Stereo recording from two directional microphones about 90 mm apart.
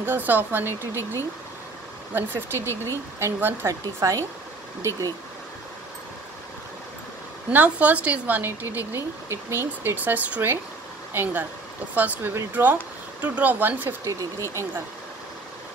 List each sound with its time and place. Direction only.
0.0 s speech: 20° right (ahead or behind)
2.1 s speech: 25° right (ahead or behind)
4.0 s speech: 40° right (ahead or behind)
7.5 s speech: 15° right (ahead or behind)
14.0 s speech: 35° right (ahead or behind)